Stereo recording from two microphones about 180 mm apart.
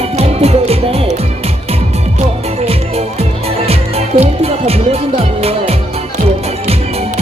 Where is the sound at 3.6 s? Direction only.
35° right (ahead or behind).